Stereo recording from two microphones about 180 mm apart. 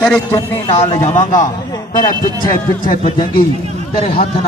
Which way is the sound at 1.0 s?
40° left (ahead or behind).